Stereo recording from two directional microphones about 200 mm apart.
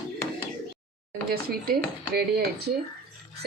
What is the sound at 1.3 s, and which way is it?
Speech, 50° right (ahead or behind).